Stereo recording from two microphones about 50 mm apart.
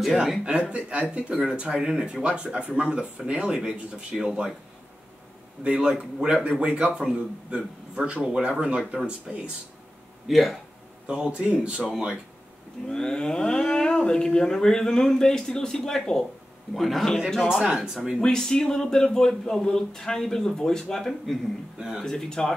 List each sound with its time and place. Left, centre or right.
0.0 s a man's voice: centre
0.5 s speech: right
1.3 s a man's voice: centre
5.6 s a man's voice: centre
10.2 s a man's voice: centre
11.1 s speech: right
12.8 s a man's voice: centre
17.5 s a man's voice: centre
18.2 s speech: centre